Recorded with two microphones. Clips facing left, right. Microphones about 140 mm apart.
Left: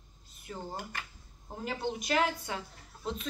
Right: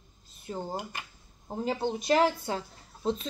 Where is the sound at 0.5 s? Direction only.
30° right (ahead or behind).